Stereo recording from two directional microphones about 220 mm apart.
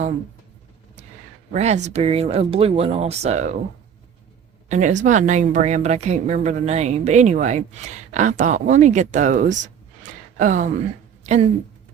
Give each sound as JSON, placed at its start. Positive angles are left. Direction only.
{"t": 1.5, "sound": "speech", "side_deg": -30}
{"t": 4.7, "sound": "a woman's voice", "side_deg": -35}
{"t": 10.0, "sound": "a sound", "side_deg": -35}